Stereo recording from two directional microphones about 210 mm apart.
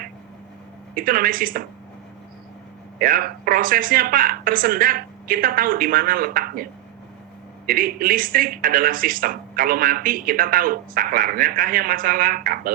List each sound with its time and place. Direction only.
0.9 s speech: 40° right (ahead or behind)
3.0 s speech: 40° right (ahead or behind)
7.7 s speech: 40° right (ahead or behind)